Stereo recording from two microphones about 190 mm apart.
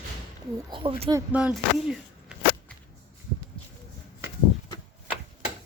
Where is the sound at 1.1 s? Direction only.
10° right (ahead or behind).